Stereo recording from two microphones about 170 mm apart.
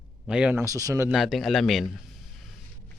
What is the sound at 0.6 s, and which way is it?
Speech, 20° right (ahead or behind).